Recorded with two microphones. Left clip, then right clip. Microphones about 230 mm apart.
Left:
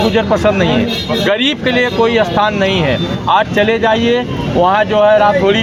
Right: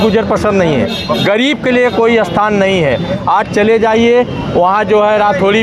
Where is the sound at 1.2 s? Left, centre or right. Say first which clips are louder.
Right 2 dB; right.